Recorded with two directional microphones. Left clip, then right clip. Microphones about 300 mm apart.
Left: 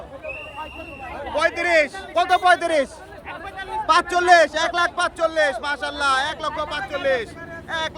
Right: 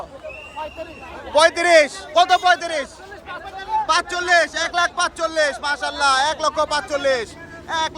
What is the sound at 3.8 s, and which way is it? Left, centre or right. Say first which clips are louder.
A man's voice: left 5 dB; centre.